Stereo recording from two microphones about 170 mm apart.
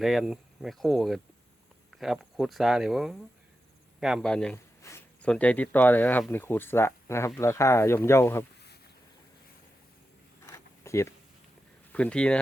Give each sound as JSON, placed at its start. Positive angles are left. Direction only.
{"t": 0.0, "sound": "speech", "side_deg": 0}
{"t": 4.8, "sound": "speech", "side_deg": 15}
{"t": 10.4, "sound": "zipper", "side_deg": 15}
{"t": 11.9, "sound": "speech", "side_deg": 5}